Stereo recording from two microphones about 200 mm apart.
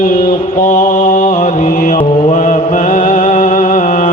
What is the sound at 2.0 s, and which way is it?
Mantra, 30° left (ahead or behind).